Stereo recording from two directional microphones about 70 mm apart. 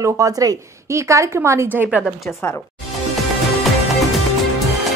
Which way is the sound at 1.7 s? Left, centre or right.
Right.